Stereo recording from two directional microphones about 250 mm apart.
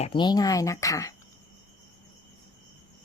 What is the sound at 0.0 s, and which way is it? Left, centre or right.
Speech, centre.